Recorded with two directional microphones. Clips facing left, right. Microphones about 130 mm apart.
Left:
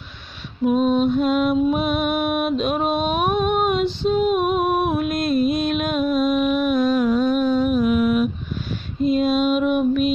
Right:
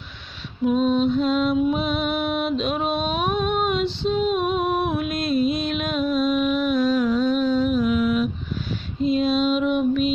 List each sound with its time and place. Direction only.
0.7 s music: 50° left (ahead or behind)